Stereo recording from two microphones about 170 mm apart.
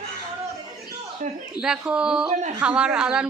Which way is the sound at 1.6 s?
5° right (ahead or behind).